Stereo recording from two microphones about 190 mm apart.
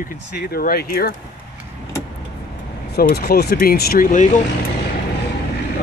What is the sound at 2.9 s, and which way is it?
Speech, 55° left (ahead or behind).